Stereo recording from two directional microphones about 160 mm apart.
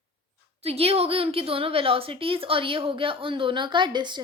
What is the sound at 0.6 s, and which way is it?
A woman's voice, 40° right (ahead or behind).